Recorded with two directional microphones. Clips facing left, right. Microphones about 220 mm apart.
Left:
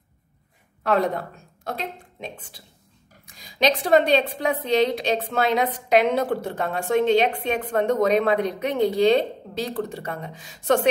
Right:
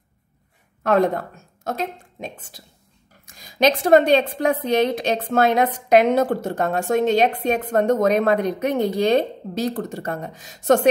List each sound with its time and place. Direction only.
0.8 s a woman's voice: 50° right (ahead or behind)